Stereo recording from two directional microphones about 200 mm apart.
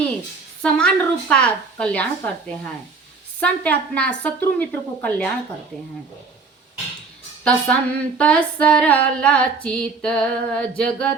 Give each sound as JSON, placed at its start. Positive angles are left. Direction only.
{"t": 0.6, "sound": "female singing", "side_deg": 5}
{"t": 3.4, "sound": "a woman's voice", "side_deg": 5}
{"t": 7.4, "sound": "a woman's voice", "side_deg": 5}
{"t": 9.1, "sound": "female singing", "side_deg": 5}